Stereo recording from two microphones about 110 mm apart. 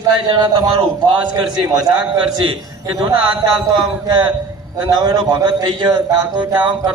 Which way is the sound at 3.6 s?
40° right (ahead or behind).